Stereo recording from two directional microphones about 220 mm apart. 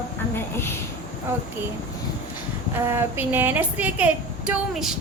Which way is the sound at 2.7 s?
10° right (ahead or behind).